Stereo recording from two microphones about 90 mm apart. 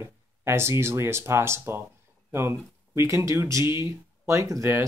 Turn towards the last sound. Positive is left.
turn(degrees=-35)  # may be behind; listen again after turning